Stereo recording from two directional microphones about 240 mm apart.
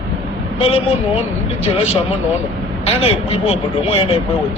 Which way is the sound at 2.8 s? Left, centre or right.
Left.